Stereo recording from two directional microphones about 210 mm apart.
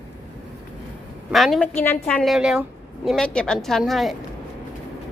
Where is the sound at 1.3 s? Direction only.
Centre (ahead or behind).